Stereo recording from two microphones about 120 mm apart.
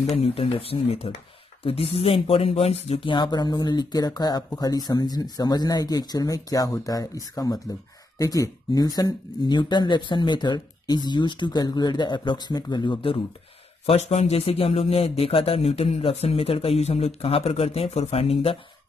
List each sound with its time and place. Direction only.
0.1 s speech: 55° left (ahead or behind)
13.8 s speech: 65° left (ahead or behind)